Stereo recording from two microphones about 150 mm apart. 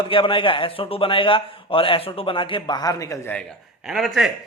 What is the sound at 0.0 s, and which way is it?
A man's voice, 35° left (ahead or behind).